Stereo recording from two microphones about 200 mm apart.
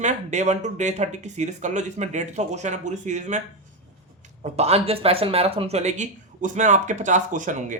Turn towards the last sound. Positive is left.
turn(degrees=-40)  # may be behind; listen again after turning